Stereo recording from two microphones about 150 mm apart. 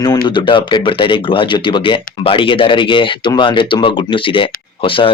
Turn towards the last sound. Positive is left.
turn(degrees=35)  # may be behind; listen again after turning